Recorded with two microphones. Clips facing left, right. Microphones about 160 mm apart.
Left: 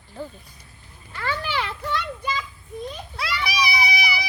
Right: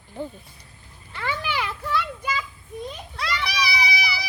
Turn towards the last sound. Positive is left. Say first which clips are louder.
# left 2 dB
turn(degrees=15)  # may be behind; listen again after turning